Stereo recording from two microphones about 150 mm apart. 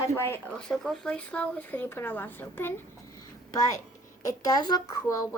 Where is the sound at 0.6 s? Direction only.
5° left (ahead or behind).